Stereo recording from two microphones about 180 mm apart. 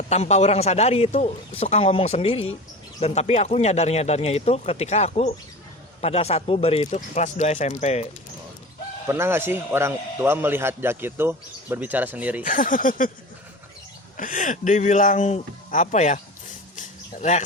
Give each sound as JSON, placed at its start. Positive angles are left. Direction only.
{"t": 0.1, "sound": "speech", "side_deg": 40}
{"t": 9.0, "sound": "a man's voice", "side_deg": -15}
{"t": 12.4, "sound": "speech", "side_deg": 50}
{"t": 14.2, "sound": "speech", "side_deg": 45}
{"t": 16.7, "sound": "a sound", "side_deg": 40}